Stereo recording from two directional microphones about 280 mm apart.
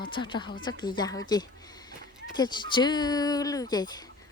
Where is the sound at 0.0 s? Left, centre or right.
Centre.